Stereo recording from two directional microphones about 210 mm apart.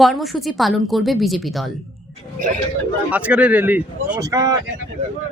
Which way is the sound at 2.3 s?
40° right (ahead or behind).